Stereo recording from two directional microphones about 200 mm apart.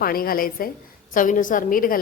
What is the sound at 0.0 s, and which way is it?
Speech, 45° left (ahead or behind).